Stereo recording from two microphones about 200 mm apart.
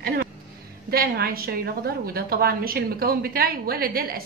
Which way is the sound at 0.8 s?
50° right (ahead or behind).